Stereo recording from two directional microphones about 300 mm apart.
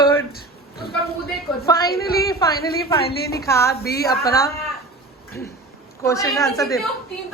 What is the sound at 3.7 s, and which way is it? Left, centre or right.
Speech, left.